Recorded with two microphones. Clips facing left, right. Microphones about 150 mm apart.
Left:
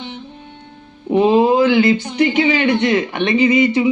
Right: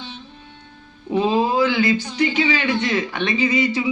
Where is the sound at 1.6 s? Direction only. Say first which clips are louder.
Left 5 dB; 55° left (ahead or behind).